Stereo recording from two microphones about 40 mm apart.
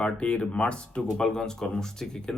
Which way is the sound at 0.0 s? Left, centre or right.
Left.